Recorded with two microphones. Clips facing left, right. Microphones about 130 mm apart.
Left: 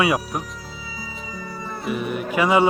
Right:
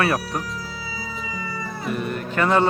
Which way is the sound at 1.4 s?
90° right.